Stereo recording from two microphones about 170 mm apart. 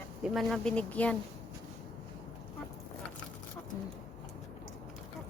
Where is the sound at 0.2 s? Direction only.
Centre (ahead or behind).